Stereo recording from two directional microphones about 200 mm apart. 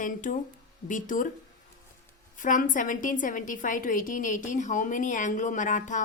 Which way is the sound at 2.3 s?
40° left (ahead or behind).